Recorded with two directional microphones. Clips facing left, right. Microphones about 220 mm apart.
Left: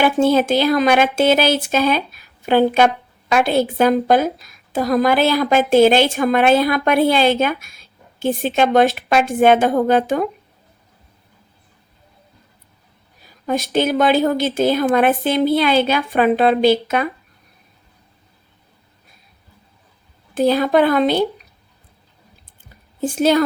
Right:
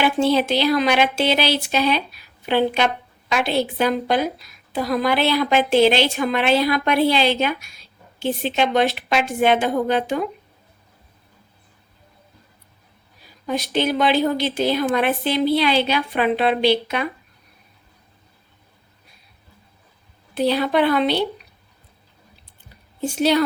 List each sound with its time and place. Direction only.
0.0 s a woman's voice: 45° left (ahead or behind)
13.2 s a woman's voice: 45° left (ahead or behind)
20.3 s a woman's voice: 45° left (ahead or behind)
23.0 s a woman's voice: 45° left (ahead or behind)